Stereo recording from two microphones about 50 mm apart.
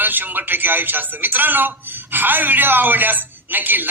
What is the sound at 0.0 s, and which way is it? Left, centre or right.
A man's voice, right.